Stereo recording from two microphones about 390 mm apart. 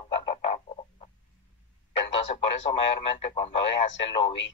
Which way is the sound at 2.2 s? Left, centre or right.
Centre.